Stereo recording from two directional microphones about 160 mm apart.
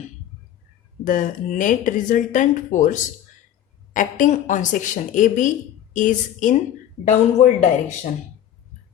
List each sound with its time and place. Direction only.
1.0 s speech: 55° left (ahead or behind)